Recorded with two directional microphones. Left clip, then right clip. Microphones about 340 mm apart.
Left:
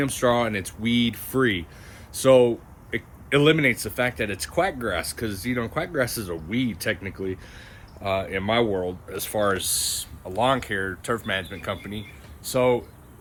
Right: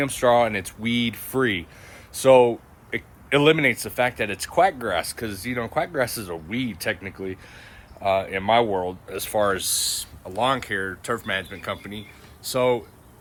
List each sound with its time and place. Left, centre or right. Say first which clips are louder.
0.0 s speech: right 3 dB; centre